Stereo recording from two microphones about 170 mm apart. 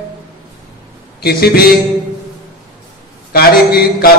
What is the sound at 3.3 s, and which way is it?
Speech, 65° left (ahead or behind).